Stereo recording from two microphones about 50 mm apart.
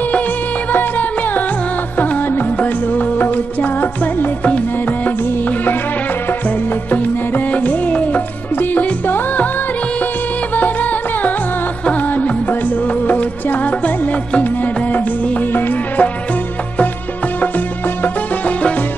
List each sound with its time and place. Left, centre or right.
0.7 s music: left
2.0 s music: left
2.6 s music: left
6.9 s music: left
10.5 s music: left